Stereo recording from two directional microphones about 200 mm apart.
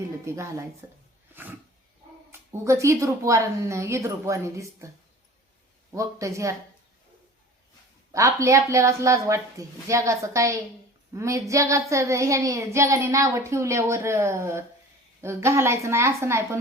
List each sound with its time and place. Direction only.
0.3 s child singing: 15° right (ahead or behind)
1.3 s roaring cats: 10° right (ahead or behind)
2.3 s child singing: 15° right (ahead or behind)
5.9 s child singing: 15° right (ahead or behind)
8.1 s child singing: 15° right (ahead or behind)